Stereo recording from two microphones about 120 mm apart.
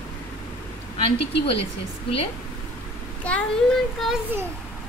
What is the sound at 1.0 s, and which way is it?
Speech, 50° left (ahead or behind).